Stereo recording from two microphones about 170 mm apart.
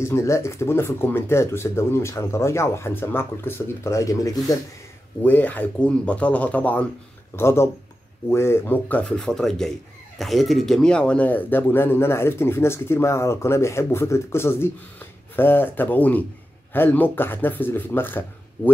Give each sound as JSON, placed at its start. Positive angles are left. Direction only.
{"t": 0.0, "sound": "speech", "side_deg": 15}